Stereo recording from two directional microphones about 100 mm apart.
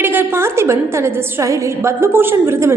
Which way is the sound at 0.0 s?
20° right (ahead or behind).